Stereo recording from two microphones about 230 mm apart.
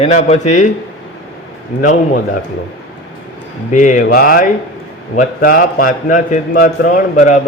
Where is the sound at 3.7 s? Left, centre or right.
Left.